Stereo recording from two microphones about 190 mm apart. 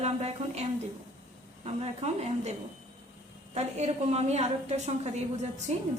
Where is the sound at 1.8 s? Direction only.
35° right (ahead or behind).